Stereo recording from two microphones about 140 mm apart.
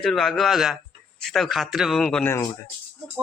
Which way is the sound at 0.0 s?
Centre (ahead or behind).